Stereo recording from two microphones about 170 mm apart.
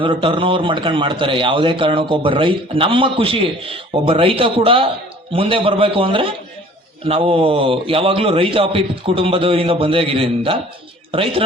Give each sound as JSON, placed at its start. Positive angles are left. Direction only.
{"t": 0.0, "sound": "a man's voice", "side_deg": -30}